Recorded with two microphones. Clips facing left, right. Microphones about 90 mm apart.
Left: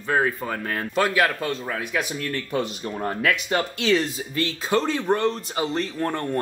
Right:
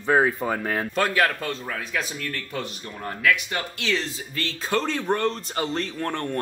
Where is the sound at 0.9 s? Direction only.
5° left (ahead or behind); by 3.6 s 30° left (ahead or behind).